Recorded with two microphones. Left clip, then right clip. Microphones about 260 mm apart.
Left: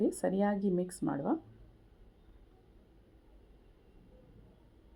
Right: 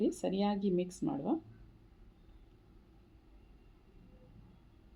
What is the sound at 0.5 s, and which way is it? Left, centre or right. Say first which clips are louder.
Speech: left 1 dB; left.